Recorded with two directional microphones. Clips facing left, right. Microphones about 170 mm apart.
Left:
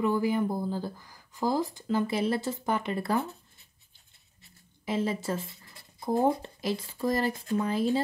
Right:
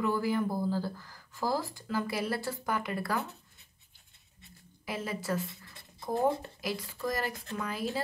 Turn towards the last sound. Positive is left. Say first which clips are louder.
# left 8 dB
turn(degrees=25)  # may be behind; listen again after turning